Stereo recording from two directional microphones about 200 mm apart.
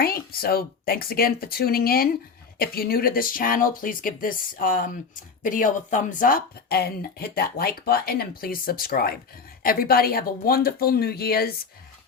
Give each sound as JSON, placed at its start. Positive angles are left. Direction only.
{"t": 0.0, "sound": "speech", "side_deg": 50}